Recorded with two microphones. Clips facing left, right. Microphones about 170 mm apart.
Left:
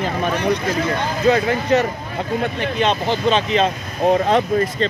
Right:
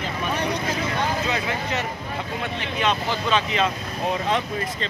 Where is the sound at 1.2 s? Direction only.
40° left (ahead or behind).